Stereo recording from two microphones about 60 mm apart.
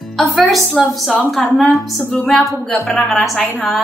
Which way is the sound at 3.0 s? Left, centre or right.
Centre.